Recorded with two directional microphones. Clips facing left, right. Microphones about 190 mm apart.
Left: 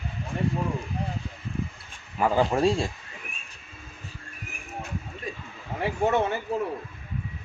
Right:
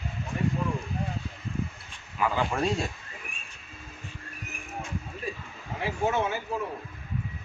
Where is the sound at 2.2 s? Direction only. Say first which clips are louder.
Left 5 dB; 40° left (ahead or behind).